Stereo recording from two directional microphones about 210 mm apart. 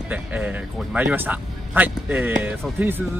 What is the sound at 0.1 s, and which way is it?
A man's voice, 5° right (ahead or behind).